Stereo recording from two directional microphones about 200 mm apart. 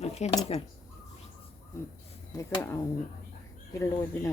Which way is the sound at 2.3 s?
15° left (ahead or behind).